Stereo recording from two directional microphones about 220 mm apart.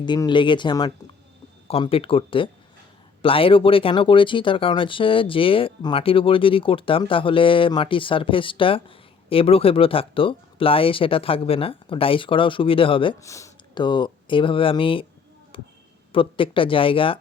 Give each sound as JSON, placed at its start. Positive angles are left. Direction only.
{"t": 0.0, "sound": "speech", "side_deg": 20}
{"t": 15.5, "sound": "a sound", "side_deg": 25}
{"t": 16.1, "sound": "speech", "side_deg": 25}